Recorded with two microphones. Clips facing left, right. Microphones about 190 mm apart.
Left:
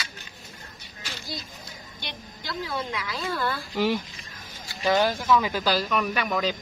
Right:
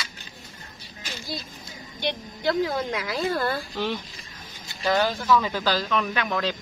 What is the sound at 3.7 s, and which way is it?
Speech, 10° left (ahead or behind).